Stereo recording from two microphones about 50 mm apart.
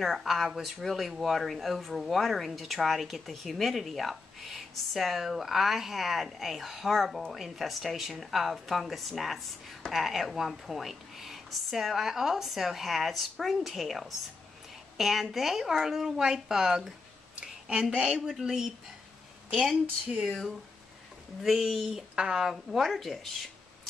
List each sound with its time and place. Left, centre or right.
0.0 s speech: centre
17.4 s a sound: centre
17.9 s speech: centre
20.1 s speech: centre
21.4 s speech: centre
22.1 s a woman's voice: centre
22.4 s speech: centre